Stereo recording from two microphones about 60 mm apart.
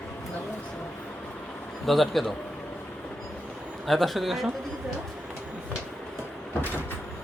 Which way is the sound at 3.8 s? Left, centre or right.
Centre.